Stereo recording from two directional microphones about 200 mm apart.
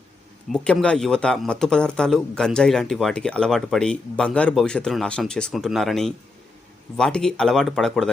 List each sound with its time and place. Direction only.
0.5 s speech: 5° left (ahead or behind)